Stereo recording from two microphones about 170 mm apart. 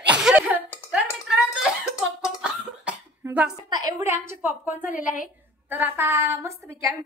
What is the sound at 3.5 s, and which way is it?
A woman's voice, 25° right (ahead or behind).